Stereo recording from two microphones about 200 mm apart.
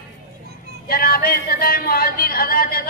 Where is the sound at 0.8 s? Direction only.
50° left (ahead or behind).